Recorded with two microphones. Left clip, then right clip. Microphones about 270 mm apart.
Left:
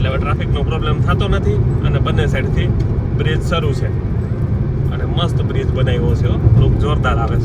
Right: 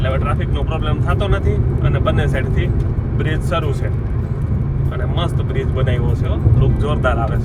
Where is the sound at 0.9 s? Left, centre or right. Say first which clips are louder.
Left 1 dB; centre.